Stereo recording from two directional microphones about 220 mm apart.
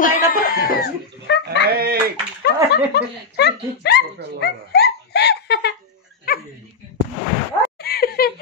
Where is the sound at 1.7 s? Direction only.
45° right (ahead or behind).